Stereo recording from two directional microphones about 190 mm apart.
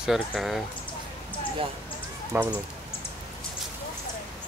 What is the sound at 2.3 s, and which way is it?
Speech, 10° right (ahead or behind).